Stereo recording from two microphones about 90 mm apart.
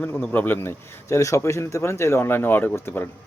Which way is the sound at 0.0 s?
20° left (ahead or behind).